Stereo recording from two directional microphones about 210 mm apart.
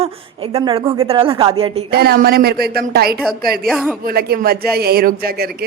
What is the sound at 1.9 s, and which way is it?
Speech, 45° right (ahead or behind).